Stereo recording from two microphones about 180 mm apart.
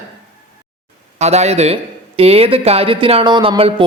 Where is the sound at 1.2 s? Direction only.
35° right (ahead or behind).